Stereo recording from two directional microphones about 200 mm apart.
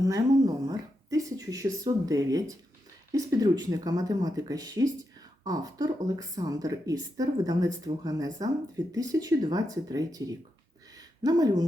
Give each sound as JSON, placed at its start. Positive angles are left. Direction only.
{"t": 0.0, "sound": "a woman's voice", "side_deg": -15}